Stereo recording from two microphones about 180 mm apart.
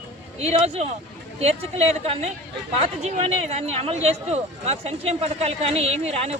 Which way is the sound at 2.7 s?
35° right (ahead or behind).